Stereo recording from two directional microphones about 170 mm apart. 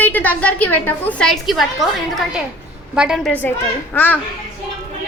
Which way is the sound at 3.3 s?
10° left (ahead or behind).